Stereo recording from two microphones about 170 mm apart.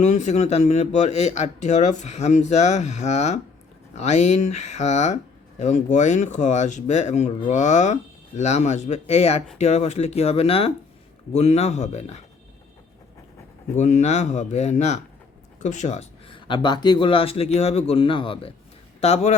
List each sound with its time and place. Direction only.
0.0 s speech: 45° left (ahead or behind)
13.7 s speech: 45° left (ahead or behind)
16.5 s a man's voice: 25° left (ahead or behind)